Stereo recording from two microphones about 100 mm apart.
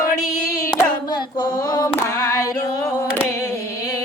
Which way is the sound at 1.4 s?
40° left (ahead or behind).